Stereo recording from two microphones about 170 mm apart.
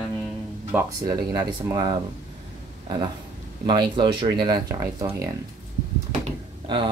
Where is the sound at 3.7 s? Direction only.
25° right (ahead or behind).